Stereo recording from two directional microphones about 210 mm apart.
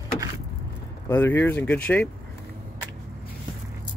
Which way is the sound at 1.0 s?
10° left (ahead or behind).